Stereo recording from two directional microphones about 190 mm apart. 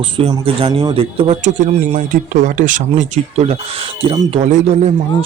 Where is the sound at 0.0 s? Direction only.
30° right (ahead or behind).